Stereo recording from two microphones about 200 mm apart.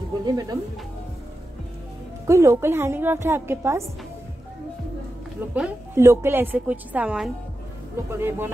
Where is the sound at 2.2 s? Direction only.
15° right (ahead or behind).